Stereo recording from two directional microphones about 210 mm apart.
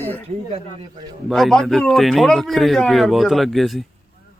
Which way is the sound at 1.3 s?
Centre (ahead or behind).